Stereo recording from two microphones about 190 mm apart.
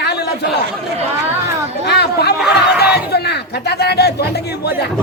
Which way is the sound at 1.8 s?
60° left (ahead or behind).